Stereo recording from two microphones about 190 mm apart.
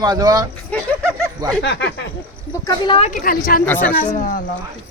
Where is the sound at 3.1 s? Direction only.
50° left (ahead or behind).